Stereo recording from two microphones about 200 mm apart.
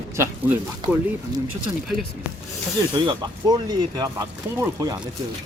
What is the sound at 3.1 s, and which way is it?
Speech, 20° right (ahead or behind).